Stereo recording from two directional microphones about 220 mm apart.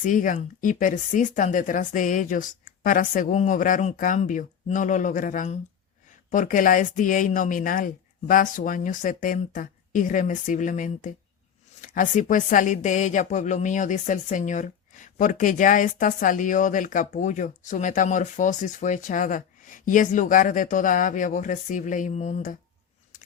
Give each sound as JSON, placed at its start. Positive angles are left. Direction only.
{"t": 0.0, "sound": "a woman's voice", "side_deg": 35}